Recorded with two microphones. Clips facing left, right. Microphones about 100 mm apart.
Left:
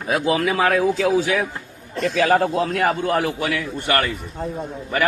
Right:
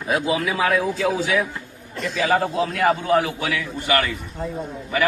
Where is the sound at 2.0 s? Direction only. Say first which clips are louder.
Left 3 dB; 60° left (ahead or behind).